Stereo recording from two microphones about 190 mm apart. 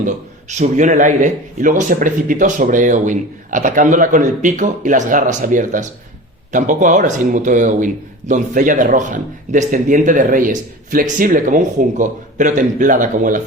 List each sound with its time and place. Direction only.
0.0 s a man's voice: 40° right (ahead or behind)